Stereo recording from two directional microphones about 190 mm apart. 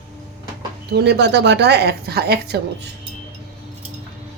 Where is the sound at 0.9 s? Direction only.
60° right (ahead or behind).